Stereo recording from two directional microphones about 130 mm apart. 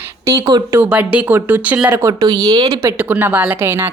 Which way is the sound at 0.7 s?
15° right (ahead or behind).